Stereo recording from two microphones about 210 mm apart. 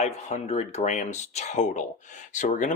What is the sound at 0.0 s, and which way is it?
Speech, 35° left (ahead or behind).